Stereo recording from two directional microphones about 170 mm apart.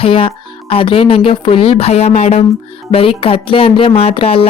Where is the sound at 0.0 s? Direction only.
30° left (ahead or behind).